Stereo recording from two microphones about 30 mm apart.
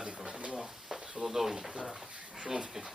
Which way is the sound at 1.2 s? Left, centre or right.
Centre.